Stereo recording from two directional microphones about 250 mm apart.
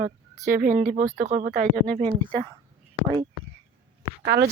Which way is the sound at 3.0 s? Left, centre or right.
Centre.